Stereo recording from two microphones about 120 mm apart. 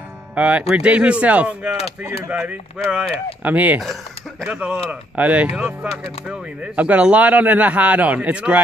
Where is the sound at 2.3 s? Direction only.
10° right (ahead or behind).